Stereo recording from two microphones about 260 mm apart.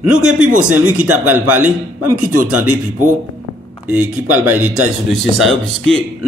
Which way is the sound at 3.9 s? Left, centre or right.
Centre.